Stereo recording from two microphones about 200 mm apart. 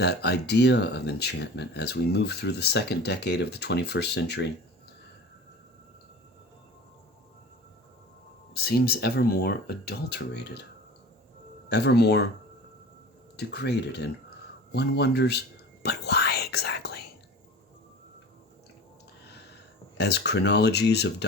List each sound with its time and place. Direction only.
0.0 s speech: 55° left (ahead or behind)
8.5 s speech: 50° left (ahead or behind)
11.7 s speech: 55° left (ahead or behind)
13.3 s speech: 55° left (ahead or behind)
14.7 s whispering: 55° left (ahead or behind)
20.0 s speech: 55° left (ahead or behind)